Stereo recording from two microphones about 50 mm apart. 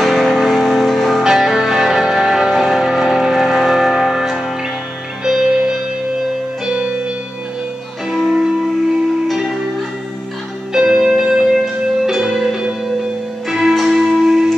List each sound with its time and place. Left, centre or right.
0.0 s music: centre
1.2 s music: centre
8.1 s music: centre
10.7 s music: centre